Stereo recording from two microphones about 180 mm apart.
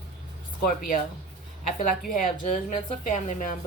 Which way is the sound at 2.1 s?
45° left (ahead or behind).